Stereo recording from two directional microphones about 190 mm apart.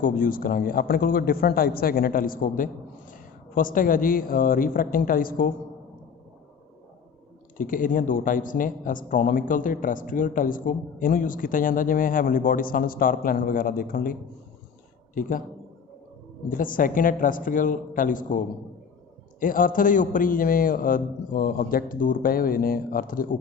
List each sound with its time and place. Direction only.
0.0 s a man's voice: 45° left (ahead or behind)
7.5 s a man's voice: 45° left (ahead or behind)
16.5 s a man's voice: 45° left (ahead or behind)